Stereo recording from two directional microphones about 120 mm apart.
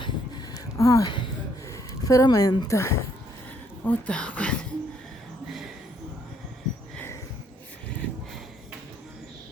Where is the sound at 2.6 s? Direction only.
25° left (ahead or behind).